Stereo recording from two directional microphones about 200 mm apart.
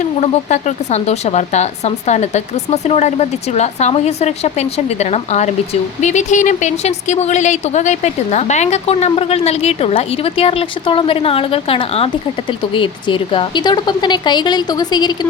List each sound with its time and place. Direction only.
0.0 s a woman's voice: 35° left (ahead or behind)